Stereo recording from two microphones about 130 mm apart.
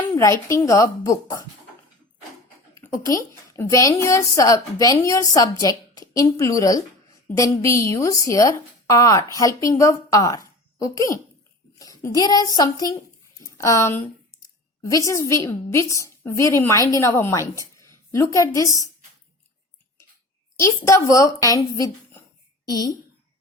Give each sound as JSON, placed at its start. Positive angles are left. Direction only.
{"t": 0.2, "sound": "a woman's voice", "side_deg": 25}
{"t": 2.7, "sound": "a woman's voice", "side_deg": 25}
{"t": 20.6, "sound": "a woman's voice", "side_deg": 25}